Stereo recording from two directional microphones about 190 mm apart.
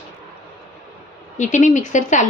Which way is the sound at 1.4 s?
40° left (ahead or behind).